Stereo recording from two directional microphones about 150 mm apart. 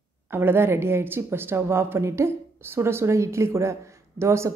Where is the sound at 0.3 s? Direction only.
15° right (ahead or behind).